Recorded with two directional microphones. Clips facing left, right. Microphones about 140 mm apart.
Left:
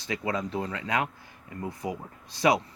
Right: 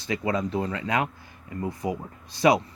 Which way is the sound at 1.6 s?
50° right (ahead or behind).